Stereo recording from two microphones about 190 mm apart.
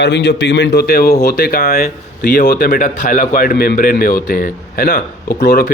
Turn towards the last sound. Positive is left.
turn(degrees=55)  # may be behind; listen again after turning